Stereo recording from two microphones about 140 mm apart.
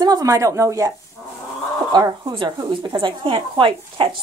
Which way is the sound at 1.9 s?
30° right (ahead or behind).